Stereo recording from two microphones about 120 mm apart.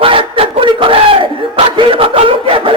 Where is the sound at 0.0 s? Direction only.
50° right (ahead or behind).